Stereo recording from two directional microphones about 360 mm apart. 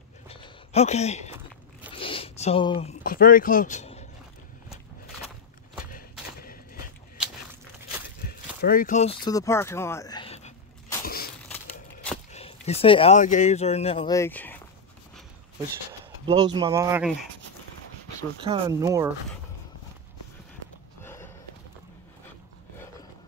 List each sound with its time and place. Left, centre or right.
0.3 s speech: centre
1.9 s a sound: centre
6.4 s a sound: left
8.2 s a sound: left
11.4 s crumpling: centre
12.3 s speech: centre
16.3 s speech: centre
18.4 s speech: centre
21.0 s run: centre